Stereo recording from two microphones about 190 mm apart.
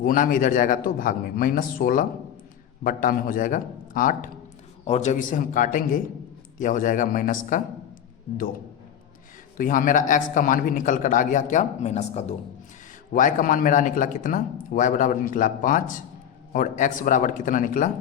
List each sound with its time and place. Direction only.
0.0 s a man's voice: 45° left (ahead or behind)
9.6 s a man's voice: 45° left (ahead or behind)